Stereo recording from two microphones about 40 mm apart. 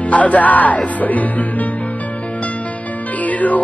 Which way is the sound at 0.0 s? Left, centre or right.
Left.